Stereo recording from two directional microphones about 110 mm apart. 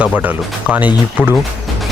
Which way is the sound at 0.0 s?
15° right (ahead or behind).